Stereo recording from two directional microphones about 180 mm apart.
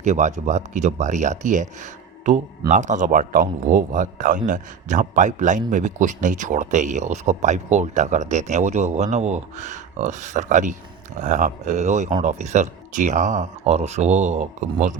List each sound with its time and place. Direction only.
0.0 s speech: 40° right (ahead or behind)